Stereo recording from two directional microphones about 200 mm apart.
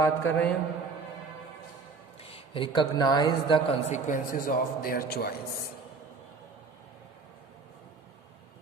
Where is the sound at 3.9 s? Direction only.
40° left (ahead or behind).